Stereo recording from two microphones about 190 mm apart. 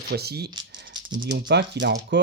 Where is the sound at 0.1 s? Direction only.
55° right (ahead or behind).